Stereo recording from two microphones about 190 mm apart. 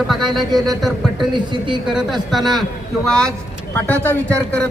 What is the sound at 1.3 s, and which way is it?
Speech, 25° right (ahead or behind).